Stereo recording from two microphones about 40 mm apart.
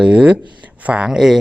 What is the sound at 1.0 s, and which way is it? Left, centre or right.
Speech, centre.